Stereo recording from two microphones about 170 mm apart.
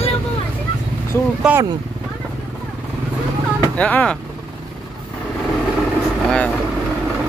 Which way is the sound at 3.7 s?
10° left (ahead or behind).